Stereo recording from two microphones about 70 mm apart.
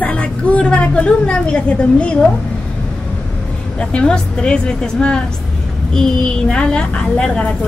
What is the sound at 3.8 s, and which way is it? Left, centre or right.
A woman's voice, centre.